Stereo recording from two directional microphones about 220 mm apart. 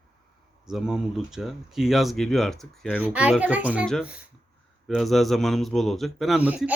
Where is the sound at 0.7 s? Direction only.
Centre (ahead or behind).